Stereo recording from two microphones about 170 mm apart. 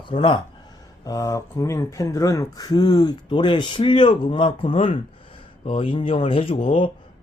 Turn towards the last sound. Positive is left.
turn(degrees=35)  # may be behind; listen again after turning